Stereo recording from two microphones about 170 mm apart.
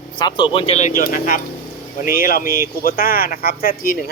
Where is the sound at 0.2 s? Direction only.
25° left (ahead or behind).